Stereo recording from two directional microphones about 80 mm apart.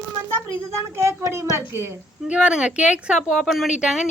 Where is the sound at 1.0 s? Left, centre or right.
Right.